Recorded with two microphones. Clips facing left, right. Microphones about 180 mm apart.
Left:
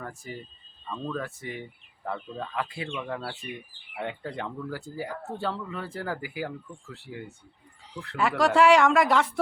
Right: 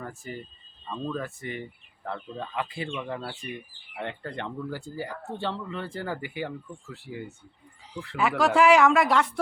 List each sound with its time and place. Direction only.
0.0 s speech: centre (ahead or behind)